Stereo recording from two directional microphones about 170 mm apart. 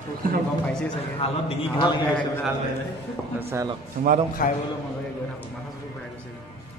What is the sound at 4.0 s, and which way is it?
Speech, 55° right (ahead or behind).